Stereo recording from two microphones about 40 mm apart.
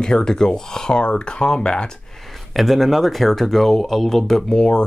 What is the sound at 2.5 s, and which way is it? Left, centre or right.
Speech, centre.